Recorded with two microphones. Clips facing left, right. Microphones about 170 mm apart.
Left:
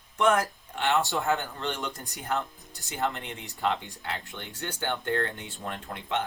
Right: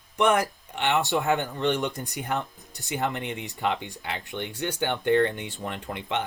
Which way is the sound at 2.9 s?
15° right (ahead or behind).